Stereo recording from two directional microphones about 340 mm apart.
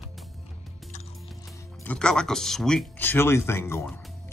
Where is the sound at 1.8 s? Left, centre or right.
Centre.